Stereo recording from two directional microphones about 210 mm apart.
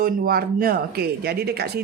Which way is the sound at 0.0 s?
45° right (ahead or behind).